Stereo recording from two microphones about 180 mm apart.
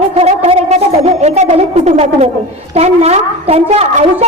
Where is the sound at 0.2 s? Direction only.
35° right (ahead or behind).